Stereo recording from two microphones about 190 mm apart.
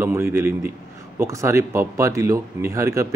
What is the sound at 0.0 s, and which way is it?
Speech, 15° right (ahead or behind).